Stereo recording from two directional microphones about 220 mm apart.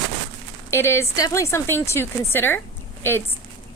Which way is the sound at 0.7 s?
10° left (ahead or behind).